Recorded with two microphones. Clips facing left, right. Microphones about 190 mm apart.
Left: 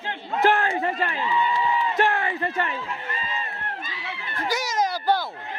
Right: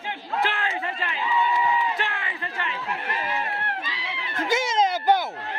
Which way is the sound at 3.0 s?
75° right (ahead or behind).